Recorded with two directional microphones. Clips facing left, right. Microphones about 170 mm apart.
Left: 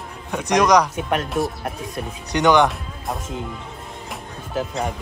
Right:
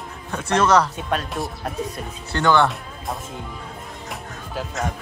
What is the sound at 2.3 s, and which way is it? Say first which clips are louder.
Speech: left 2 dB; 15° left (ahead or behind).